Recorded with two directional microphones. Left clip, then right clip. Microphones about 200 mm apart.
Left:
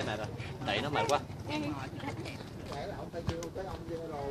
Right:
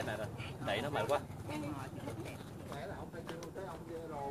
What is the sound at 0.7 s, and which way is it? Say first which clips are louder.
Speech: left 4 dB; 45° left (ahead or behind).